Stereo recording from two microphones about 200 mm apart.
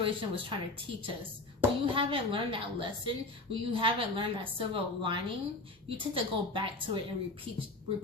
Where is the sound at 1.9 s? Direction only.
25° right (ahead or behind).